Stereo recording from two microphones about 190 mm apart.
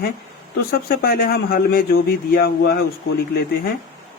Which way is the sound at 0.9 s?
50° left (ahead or behind).